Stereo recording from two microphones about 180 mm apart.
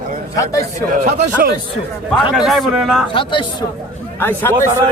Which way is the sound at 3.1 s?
30° left (ahead or behind).